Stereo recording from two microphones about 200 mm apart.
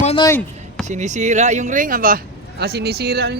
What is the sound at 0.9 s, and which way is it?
Speech, 35° right (ahead or behind).